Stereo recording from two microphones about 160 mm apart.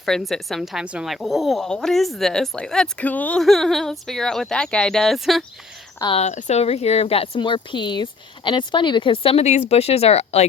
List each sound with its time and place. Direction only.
0.0 s speech: centre (ahead or behind)
6.1 s speech: 45° left (ahead or behind)